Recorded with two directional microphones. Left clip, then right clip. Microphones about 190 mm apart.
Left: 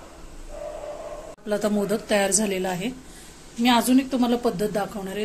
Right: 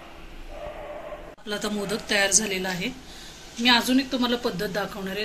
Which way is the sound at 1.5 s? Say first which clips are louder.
Left 5 dB; 45° left (ahead or behind).